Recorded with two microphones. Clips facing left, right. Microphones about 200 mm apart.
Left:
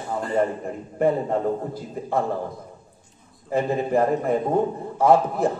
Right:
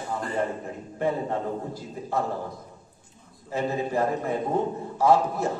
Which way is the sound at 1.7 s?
55° left (ahead or behind).